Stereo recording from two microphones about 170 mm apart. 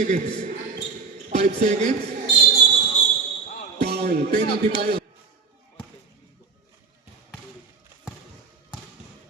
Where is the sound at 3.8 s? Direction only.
75° right (ahead or behind).